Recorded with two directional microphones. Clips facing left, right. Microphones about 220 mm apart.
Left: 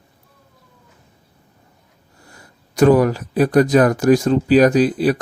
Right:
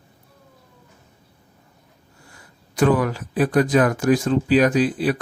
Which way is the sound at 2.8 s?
40° left (ahead or behind).